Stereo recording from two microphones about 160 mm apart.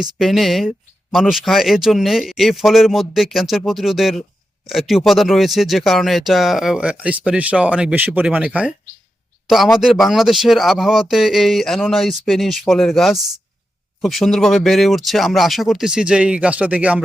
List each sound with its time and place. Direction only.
0.0 s speech: centre (ahead or behind)